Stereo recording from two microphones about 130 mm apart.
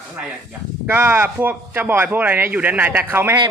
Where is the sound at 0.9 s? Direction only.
20° right (ahead or behind).